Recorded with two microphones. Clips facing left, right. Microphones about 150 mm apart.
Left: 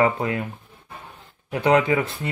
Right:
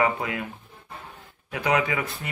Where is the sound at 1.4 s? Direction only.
30° left (ahead or behind).